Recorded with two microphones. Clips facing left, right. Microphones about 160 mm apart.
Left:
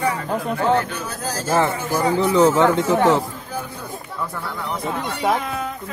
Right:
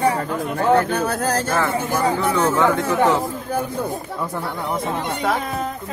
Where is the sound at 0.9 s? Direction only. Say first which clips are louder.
Right 7 dB; 60° right (ahead or behind).